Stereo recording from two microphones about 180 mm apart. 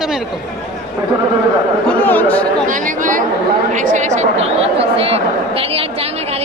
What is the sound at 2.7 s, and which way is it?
A woman's voice, 45° right (ahead or behind).